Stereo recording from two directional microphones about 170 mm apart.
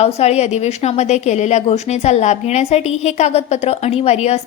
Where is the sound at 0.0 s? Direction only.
40° left (ahead or behind).